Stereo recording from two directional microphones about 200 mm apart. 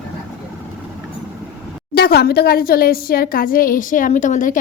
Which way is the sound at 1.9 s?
50° left (ahead or behind).